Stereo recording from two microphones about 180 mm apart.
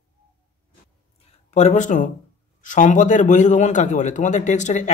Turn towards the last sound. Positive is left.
turn(degrees=40)  # may be behind; listen again after turning